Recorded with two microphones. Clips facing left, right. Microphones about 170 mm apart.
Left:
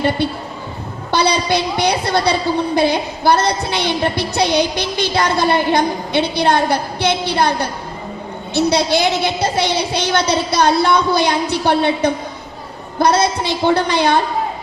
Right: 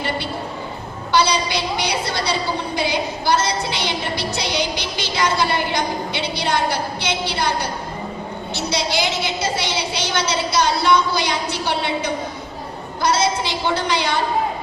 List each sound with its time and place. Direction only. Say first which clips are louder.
1.1 s a woman's voice: left 3 dB; 55° left (ahead or behind)
8.5 s a woman's voice: left 8 dB; 55° left (ahead or behind)